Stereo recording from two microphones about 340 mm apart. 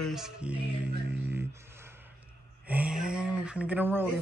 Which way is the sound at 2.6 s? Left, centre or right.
Centre.